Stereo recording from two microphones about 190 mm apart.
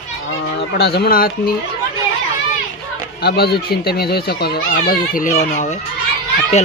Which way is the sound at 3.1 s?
55° left (ahead or behind).